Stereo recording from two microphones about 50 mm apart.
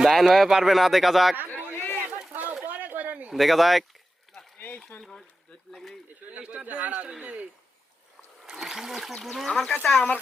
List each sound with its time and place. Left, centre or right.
0.0 s speech: centre
1.7 s chatter: left
2.3 s a sound: right
3.2 s speech: centre
4.5 s a sound: left
6.4 s speech: centre
6.7 s speech: right
8.4 s speech: centre